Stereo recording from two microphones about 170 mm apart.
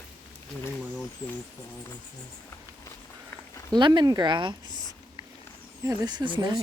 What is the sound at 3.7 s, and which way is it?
Speech, 25° right (ahead or behind).